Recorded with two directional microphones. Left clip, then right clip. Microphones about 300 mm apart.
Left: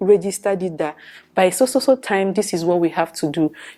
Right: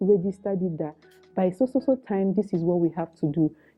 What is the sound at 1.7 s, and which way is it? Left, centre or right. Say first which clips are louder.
Speech: left 8 dB; centre.